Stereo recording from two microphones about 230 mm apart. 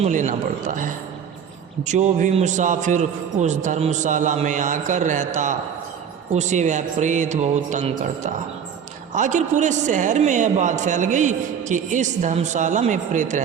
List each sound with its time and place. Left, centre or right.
0.0 s a man's voice: right